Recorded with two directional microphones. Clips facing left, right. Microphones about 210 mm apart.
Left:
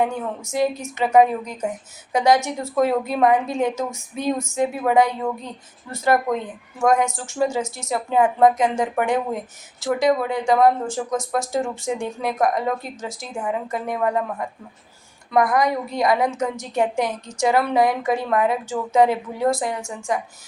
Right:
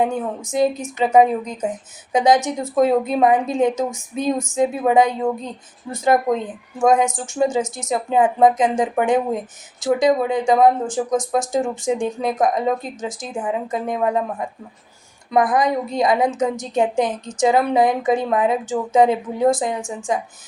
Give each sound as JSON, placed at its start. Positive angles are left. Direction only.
{"t": 0.5, "sound": "a woman's voice", "side_deg": -20}